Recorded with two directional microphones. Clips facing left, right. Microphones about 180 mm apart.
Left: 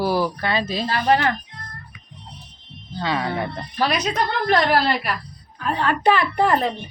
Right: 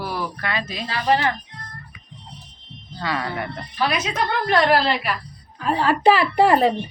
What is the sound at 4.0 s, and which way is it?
Speech, 45° left (ahead or behind).